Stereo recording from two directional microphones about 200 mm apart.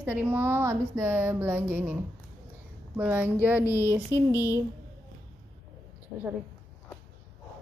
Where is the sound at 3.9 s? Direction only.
10° right (ahead or behind).